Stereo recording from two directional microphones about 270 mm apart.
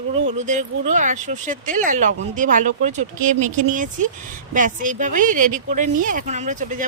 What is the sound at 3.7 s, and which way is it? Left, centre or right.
Speech, right.